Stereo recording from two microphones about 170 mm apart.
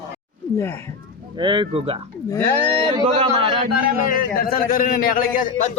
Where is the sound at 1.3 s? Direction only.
30° right (ahead or behind).